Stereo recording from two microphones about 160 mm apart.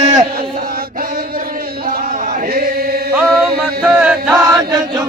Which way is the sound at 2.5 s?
75° right (ahead or behind).